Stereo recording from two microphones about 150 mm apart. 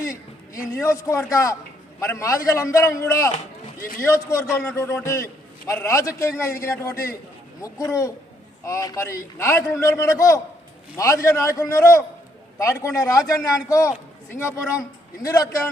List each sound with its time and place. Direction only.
0.5 s a man's voice: 20° left (ahead or behind)
3.8 s a man's voice: 70° left (ahead or behind)
4.0 s a man's voice: 20° left (ahead or behind)